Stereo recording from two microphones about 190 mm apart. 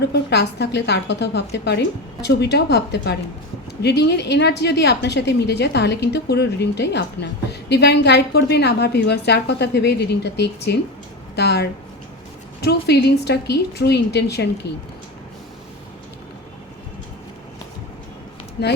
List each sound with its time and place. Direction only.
0.0 s a woman's voice: 60° left (ahead or behind)
18.6 s a woman's voice: 60° left (ahead or behind)